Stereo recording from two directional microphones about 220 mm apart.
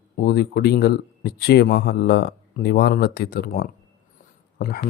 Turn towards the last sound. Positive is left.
turn(degrees=45)  # may be behind; listen again after turning